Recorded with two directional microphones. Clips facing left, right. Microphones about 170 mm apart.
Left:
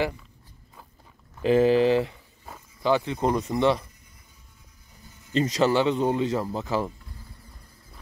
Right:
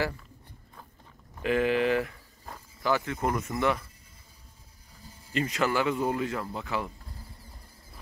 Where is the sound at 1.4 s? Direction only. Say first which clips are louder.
Left 6 dB; 30° left (ahead or behind).